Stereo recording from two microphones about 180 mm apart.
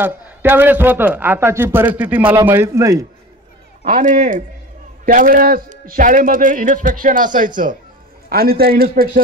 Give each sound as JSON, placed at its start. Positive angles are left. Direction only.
{"t": 0.0, "sound": "a man's voice", "side_deg": -10}
{"t": 3.8, "sound": "a man's voice", "side_deg": -45}
{"t": 8.3, "sound": "a man's voice", "side_deg": -55}